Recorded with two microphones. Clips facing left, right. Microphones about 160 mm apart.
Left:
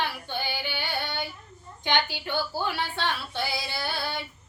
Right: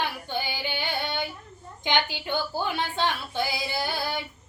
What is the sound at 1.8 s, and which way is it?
Speech, 15° right (ahead or behind).